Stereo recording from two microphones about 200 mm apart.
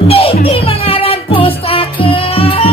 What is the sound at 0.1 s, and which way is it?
Music, 30° left (ahead or behind).